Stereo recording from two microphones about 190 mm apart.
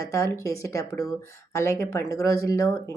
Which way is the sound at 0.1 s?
15° left (ahead or behind).